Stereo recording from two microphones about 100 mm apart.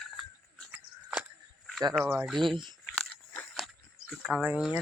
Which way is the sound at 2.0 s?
25° right (ahead or behind).